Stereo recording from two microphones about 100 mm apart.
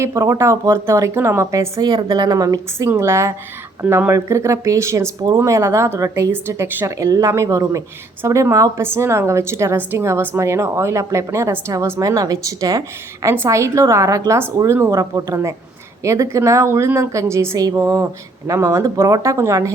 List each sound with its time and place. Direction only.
0.0 s a woman's voice: 25° right (ahead or behind)
1.8 s a woman's voice: 45° right (ahead or behind)
13.2 s a woman's voice: 25° right (ahead or behind)